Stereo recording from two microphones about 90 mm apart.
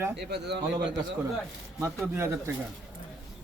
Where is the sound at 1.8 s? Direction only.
25° right (ahead or behind).